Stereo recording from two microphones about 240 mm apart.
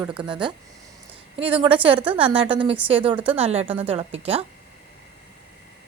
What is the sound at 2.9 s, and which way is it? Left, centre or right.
Speech, right.